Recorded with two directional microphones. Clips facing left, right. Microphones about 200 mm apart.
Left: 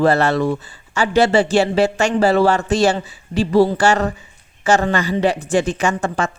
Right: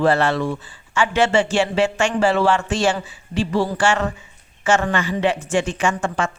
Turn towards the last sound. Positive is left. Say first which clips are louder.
# left 2 dB
turn(degrees=40)  # may be behind; listen again after turning